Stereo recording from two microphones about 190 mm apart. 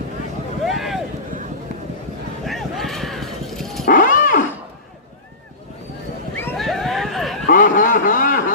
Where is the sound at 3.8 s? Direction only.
45° left (ahead or behind).